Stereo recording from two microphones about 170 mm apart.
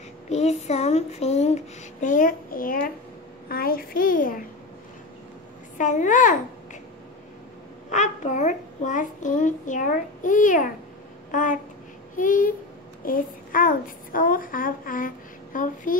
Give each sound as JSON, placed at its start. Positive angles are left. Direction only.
{"t": 0.3, "sound": "a child's voice", "side_deg": 40}
{"t": 5.8, "sound": "a child's voice", "side_deg": 45}
{"t": 7.9, "sound": "a woman's voice", "side_deg": 45}